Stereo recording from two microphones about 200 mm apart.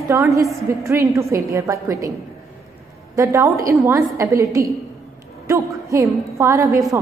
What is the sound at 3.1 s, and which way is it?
A woman's voice, 15° right (ahead or behind).